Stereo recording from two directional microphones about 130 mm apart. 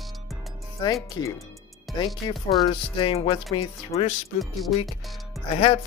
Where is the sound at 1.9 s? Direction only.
35° left (ahead or behind).